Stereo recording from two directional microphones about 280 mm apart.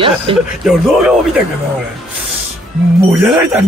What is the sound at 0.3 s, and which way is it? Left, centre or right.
Speech, centre.